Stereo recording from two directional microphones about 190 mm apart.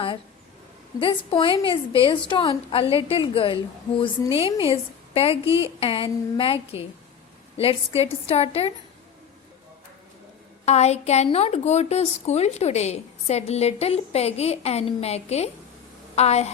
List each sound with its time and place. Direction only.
0.9 s a woman's voice: 25° left (ahead or behind)
5.5 s speech: 15° right (ahead or behind)
5.8 s a woman's voice: 30° left (ahead or behind)
10.7 s a woman's voice: 35° left (ahead or behind)